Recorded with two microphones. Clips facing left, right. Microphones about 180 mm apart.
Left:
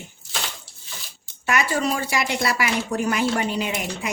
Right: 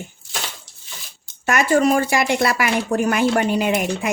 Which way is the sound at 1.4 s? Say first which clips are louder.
Right 6 dB; 45° right (ahead or behind).